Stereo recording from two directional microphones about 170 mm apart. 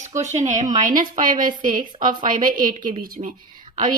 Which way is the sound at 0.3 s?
45° right (ahead or behind).